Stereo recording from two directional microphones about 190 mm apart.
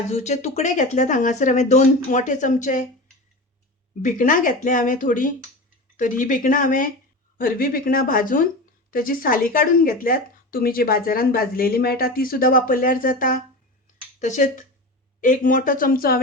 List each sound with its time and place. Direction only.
0.1 s speech: 35° left (ahead or behind)
4.0 s speech: 45° left (ahead or behind)